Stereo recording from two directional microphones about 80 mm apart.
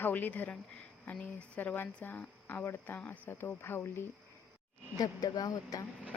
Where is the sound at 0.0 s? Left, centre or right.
Left.